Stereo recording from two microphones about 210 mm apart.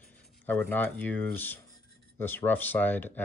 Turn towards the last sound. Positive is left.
turn(degrees=10)  # may be behind; listen again after turning